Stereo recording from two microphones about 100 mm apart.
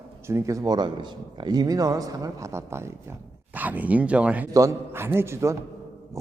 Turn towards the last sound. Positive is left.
turn(degrees=-30)  # may be behind; listen again after turning